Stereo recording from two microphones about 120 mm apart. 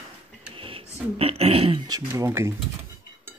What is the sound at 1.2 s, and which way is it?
Speech, 55° right (ahead or behind).